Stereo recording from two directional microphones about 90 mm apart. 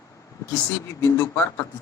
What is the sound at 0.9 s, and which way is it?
Speech, 35° left (ahead or behind).